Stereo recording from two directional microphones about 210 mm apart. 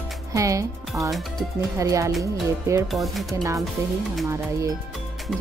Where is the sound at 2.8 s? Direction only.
Centre (ahead or behind).